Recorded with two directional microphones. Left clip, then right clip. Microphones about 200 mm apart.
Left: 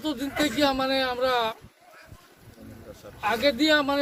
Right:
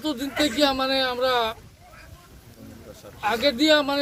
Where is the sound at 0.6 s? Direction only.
Centre (ahead or behind).